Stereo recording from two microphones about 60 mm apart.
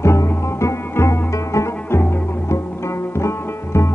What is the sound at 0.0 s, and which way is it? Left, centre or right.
Music, left.